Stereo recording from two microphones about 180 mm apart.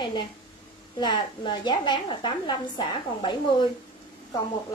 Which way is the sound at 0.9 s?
25° left (ahead or behind).